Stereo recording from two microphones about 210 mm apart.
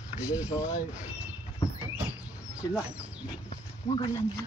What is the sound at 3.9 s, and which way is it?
Speech, 20° left (ahead or behind).